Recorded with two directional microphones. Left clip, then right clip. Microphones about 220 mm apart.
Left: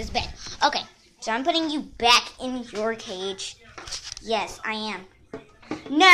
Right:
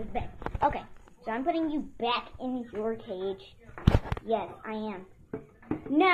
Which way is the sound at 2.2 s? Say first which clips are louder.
Left 9 dB; 40° left (ahead or behind).